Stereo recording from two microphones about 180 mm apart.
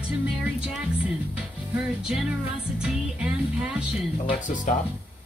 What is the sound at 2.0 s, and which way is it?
Speech, 5° right (ahead or behind).